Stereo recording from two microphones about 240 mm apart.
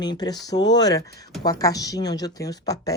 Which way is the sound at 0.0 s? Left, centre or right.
Centre.